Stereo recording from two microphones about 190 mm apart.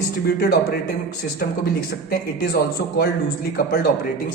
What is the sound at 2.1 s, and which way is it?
A man's voice, 55° left (ahead or behind).